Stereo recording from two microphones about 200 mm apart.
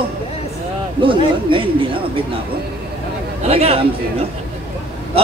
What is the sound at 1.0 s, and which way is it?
Speech, 25° right (ahead or behind).